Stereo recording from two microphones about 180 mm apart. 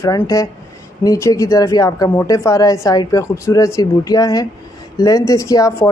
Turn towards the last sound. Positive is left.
turn(degrees=20)  # may be behind; listen again after turning